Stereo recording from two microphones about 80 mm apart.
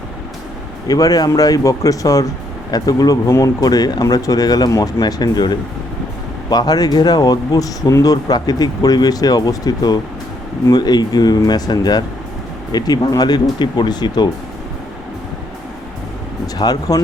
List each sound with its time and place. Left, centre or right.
0.9 s speech: left
16.6 s speech: left